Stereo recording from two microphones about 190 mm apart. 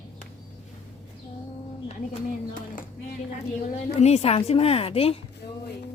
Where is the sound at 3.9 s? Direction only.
35° left (ahead or behind).